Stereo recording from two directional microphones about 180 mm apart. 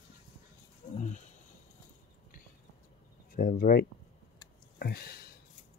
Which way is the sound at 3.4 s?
50° left (ahead or behind).